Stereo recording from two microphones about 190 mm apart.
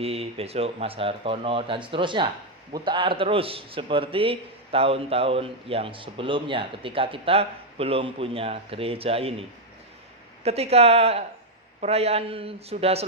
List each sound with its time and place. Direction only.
0.0 s a man's voice: 30° right (ahead or behind)
10.4 s speech: 35° right (ahead or behind)